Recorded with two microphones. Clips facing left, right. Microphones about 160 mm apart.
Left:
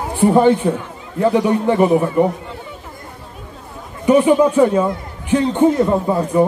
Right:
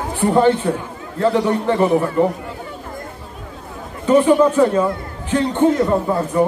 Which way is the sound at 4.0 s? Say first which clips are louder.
Left 1 dB; 15° left (ahead or behind).